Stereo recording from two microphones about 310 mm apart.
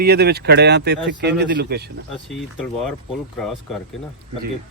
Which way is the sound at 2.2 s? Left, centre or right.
Centre.